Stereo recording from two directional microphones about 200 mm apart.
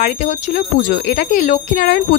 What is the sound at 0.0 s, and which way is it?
Speech, 40° left (ahead or behind).